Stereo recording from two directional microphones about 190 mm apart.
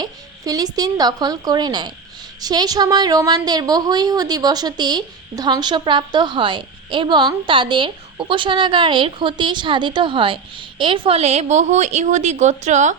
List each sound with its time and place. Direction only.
0.0 s a woman's voice: 20° right (ahead or behind); by 13.0 s 40° right (ahead or behind)